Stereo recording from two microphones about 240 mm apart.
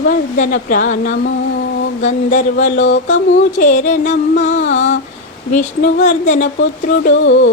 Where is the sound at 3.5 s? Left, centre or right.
Left.